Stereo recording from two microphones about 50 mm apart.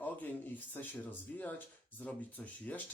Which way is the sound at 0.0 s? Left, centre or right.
Left.